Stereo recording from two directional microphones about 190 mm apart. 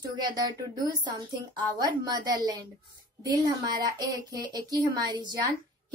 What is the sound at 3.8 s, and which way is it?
Speech, 20° right (ahead or behind).